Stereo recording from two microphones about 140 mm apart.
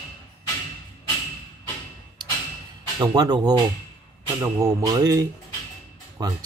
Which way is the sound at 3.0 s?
30° right (ahead or behind).